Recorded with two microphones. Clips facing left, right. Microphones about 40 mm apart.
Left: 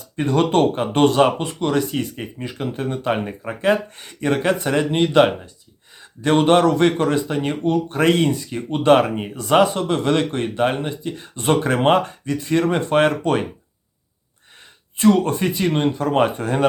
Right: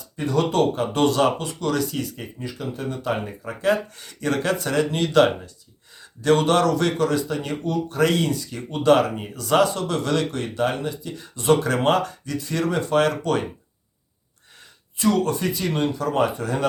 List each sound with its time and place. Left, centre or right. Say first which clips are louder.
0.2 s speech: left 4 dB; left
14.9 s speech: left 5 dB; left